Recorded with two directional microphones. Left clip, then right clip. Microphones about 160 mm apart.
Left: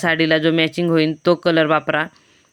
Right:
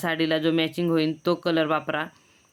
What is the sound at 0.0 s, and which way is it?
Speech, 35° left (ahead or behind).